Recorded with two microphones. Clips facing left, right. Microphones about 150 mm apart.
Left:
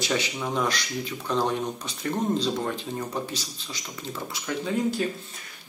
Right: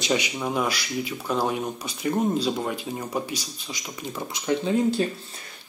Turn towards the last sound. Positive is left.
turn(degrees=-25)  # may be behind; listen again after turning